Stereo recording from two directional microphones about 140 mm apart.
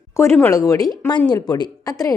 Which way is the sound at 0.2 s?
15° left (ahead or behind).